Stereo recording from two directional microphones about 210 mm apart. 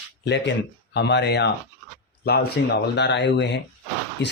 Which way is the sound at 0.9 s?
55° left (ahead or behind).